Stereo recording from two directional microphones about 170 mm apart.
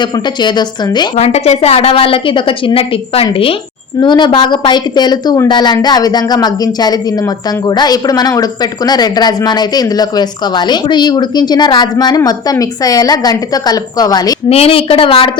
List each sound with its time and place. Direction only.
0.0 s speech: 25° left (ahead or behind)
1.1 s a woman's voice: 40° left (ahead or behind); by 14.3 s 25° left (ahead or behind)
14.5 s a woman's voice: 35° left (ahead or behind)